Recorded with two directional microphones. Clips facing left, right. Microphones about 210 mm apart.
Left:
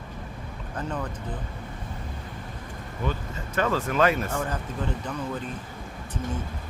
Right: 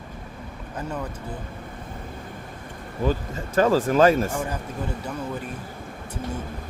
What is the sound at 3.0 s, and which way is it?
Speech, 35° right (ahead or behind).